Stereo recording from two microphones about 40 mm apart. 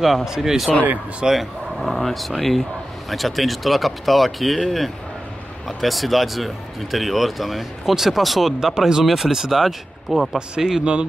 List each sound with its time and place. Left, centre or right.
0.2 s speech: centre
10.3 s speech: centre
10.8 s speech: right